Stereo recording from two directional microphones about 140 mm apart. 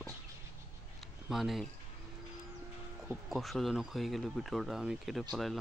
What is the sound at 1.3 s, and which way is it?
Speech, centre (ahead or behind).